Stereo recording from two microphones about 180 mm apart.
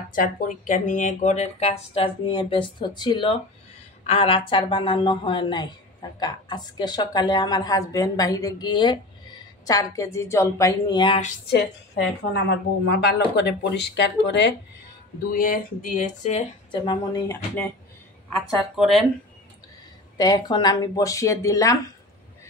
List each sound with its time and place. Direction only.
0.1 s a woman's voice: 50° left (ahead or behind); by 11.1 s 25° left (ahead or behind)
12.4 s speech: 65° left (ahead or behind)
15.3 s speech: 50° left (ahead or behind)
16.7 s a woman's voice: 25° left (ahead or behind)
18.8 s speech: centre (ahead or behind)
20.2 s a woman's voice: 25° left (ahead or behind)